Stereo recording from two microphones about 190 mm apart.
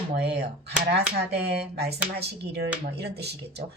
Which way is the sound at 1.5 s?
60° right (ahead or behind).